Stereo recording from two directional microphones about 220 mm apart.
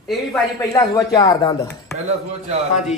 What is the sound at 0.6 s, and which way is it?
Speech, 15° left (ahead or behind).